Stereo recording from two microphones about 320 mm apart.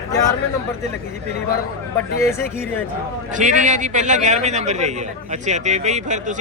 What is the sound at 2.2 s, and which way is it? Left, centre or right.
Speech, centre.